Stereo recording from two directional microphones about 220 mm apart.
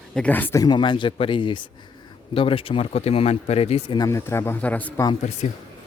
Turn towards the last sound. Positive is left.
turn(degrees=30)  # may be behind; listen again after turning